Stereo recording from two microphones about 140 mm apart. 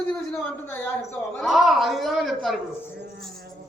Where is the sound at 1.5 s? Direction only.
Centre (ahead or behind).